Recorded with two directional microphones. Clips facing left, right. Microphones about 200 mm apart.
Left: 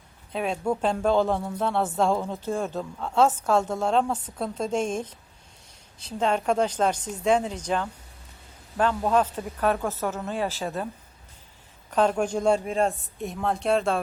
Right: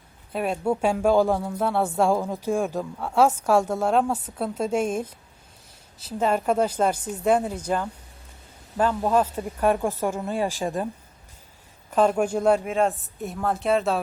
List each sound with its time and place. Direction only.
0.3 s speech: 5° right (ahead or behind)
11.9 s a woman's voice: 5° right (ahead or behind)